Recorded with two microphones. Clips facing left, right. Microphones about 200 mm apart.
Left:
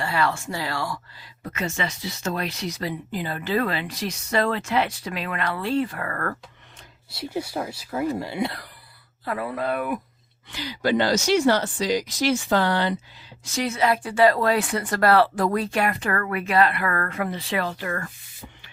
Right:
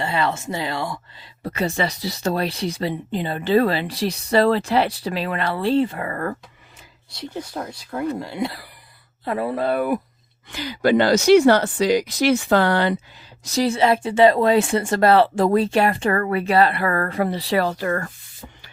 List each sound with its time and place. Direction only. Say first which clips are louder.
0.0 s speech: right 2 dB; 20° right (ahead or behind)
1.5 s speech: right 6 dB; 35° right (ahead or behind); by 6.3 s 20° right (ahead or behind)
7.1 s speech: left 2 dB; 10° left (ahead or behind)
9.2 s speech: right 5 dB; 25° right (ahead or behind)
10.5 s speech: right 5 dB; 50° right (ahead or behind)
13.4 s speech: right 5 dB; 35° right (ahead or behind)